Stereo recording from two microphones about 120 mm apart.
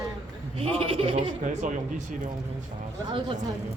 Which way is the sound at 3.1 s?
45° right (ahead or behind).